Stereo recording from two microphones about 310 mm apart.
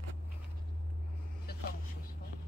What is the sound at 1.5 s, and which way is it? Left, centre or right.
Vehicle, left.